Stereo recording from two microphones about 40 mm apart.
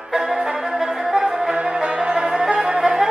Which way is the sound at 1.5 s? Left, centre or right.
Right.